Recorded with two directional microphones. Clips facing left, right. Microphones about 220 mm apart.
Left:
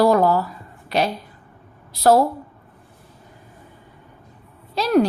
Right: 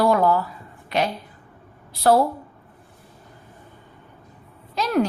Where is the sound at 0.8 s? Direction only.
35° left (ahead or behind).